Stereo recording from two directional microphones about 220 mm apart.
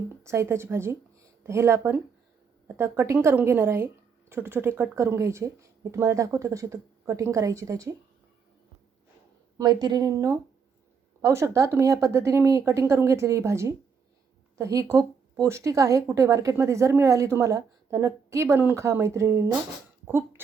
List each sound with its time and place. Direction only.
0.2 s speech: 10° right (ahead or behind)
9.6 s speech: 20° right (ahead or behind)